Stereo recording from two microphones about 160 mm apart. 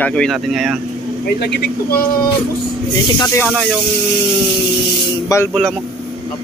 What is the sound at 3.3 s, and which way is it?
Speech, 5° left (ahead or behind).